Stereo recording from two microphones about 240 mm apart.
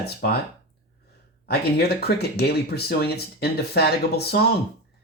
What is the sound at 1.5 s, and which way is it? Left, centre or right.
Speech, left.